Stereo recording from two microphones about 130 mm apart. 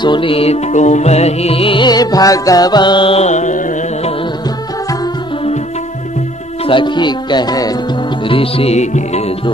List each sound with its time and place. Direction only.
0.0 s music: 40° left (ahead or behind); by 4.1 s 65° left (ahead or behind)
6.6 s speech: 40° left (ahead or behind)
8.3 s music: 45° left (ahead or behind)